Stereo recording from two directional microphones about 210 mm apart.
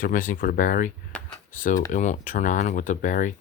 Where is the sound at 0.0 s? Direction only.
40° left (ahead or behind).